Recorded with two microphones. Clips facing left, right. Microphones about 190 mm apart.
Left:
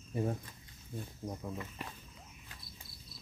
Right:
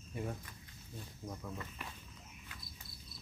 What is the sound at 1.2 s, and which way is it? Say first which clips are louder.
Speech: left 3 dB; 20° left (ahead or behind).